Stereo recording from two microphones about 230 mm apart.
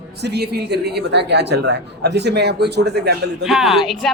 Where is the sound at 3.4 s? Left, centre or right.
Centre.